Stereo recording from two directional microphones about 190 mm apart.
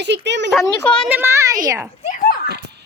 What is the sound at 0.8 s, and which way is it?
Speech, 5° left (ahead or behind).